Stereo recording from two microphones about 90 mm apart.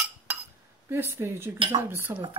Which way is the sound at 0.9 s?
25° right (ahead or behind).